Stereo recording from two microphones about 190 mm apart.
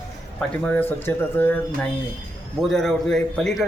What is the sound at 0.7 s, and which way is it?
Speech, 10° left (ahead or behind).